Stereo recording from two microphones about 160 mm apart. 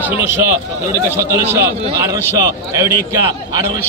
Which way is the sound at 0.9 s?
15° right (ahead or behind).